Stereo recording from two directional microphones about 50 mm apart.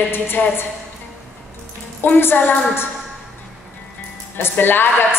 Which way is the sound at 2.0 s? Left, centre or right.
Left.